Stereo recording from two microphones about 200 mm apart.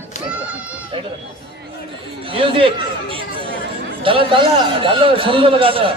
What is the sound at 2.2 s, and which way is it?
A man's voice, 25° right (ahead or behind).